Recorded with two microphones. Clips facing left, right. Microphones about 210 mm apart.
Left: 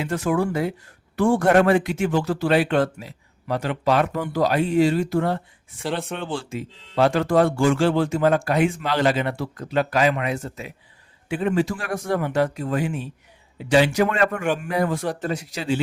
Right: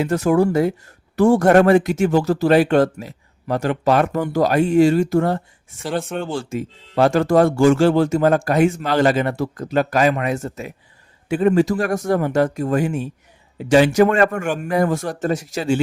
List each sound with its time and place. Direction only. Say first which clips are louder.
0.0 s speech: right 6 dB; 40° right (ahead or behind)